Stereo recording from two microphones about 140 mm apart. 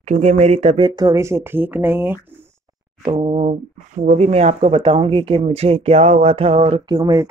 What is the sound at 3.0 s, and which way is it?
Speech, 40° right (ahead or behind).